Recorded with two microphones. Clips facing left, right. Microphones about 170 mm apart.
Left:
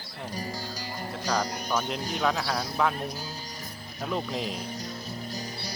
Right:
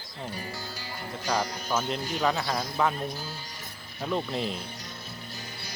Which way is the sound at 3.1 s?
40° left (ahead or behind).